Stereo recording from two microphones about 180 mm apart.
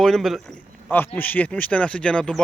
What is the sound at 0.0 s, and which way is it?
A man's voice, centre (ahead or behind).